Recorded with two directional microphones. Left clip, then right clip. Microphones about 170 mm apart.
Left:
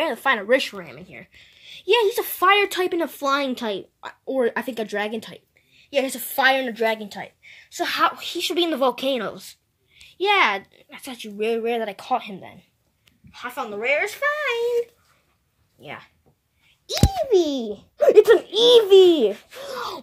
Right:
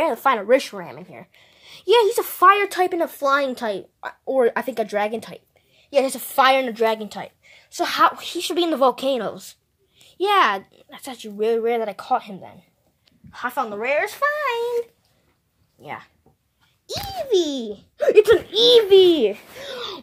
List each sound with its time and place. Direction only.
0.0 s speech: 20° right (ahead or behind)
13.3 s speech: 30° right (ahead or behind)
15.8 s a child's voice: 15° right (ahead or behind); by 19.8 s 5° left (ahead or behind)